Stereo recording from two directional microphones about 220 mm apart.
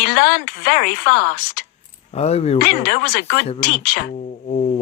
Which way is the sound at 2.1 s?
30° left (ahead or behind).